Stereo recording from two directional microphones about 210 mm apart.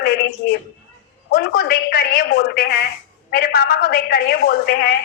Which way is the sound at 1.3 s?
45° left (ahead or behind).